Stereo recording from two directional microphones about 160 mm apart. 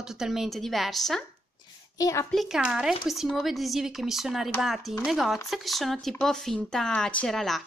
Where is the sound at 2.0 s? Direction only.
20° left (ahead or behind).